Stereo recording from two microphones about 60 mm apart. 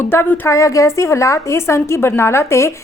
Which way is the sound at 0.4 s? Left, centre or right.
Left.